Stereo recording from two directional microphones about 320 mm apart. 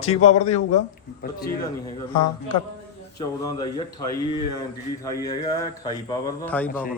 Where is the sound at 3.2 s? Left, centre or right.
Centre.